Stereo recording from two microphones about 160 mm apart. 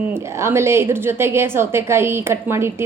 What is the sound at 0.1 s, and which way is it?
A woman's voice, 15° right (ahead or behind).